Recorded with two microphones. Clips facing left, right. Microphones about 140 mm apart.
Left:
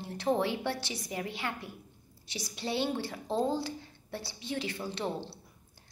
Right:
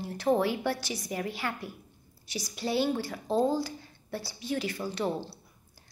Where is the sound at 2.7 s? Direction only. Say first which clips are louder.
Right 4 dB; 25° left (ahead or behind).